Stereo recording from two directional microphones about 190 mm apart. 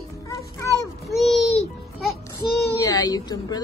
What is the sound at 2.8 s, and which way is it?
Speech, 20° left (ahead or behind).